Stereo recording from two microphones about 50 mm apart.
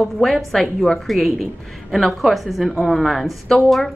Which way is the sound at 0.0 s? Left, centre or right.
Centre.